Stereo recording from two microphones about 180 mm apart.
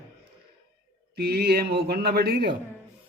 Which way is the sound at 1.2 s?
60° right (ahead or behind).